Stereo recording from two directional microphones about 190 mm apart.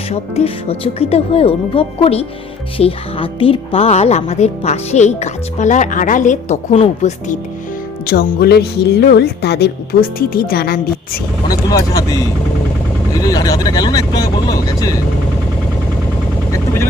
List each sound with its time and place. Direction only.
0.1 s speech: 30° left (ahead or behind)
8.0 s speech: 55° left (ahead or behind)
11.4 s speech: 20° left (ahead or behind)
13.2 s speech: 20° left (ahead or behind)
16.5 s vehicle: 15° left (ahead or behind)